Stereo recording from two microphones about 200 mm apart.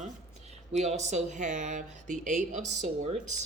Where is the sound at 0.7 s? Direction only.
35° right (ahead or behind).